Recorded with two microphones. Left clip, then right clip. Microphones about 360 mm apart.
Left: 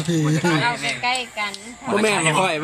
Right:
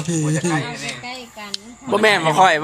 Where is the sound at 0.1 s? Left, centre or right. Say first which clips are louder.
Left 1 dB; centre.